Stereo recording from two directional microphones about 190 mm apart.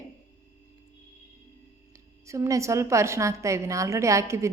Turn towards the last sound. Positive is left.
turn(degrees=-15)  # may be behind; listen again after turning